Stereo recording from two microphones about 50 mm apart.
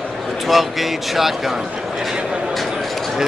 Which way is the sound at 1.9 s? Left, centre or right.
Centre.